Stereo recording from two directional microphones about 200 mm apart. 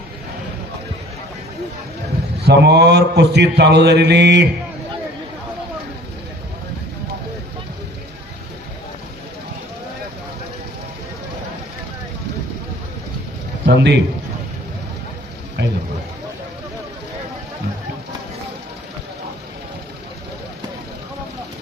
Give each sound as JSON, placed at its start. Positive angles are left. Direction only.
{"t": 2.5, "sound": "mantra", "side_deg": -55}
{"t": 13.7, "sound": "mantra", "side_deg": -60}
{"t": 15.6, "sound": "a sound", "side_deg": -60}